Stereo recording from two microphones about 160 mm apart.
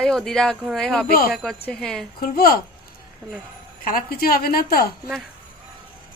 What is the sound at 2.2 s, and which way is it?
Speech, 65° left (ahead or behind).